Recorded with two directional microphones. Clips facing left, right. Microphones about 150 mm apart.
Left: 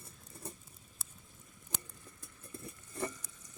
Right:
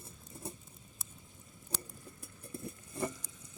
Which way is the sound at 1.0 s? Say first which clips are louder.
Left 1 dB; centre (ahead or behind).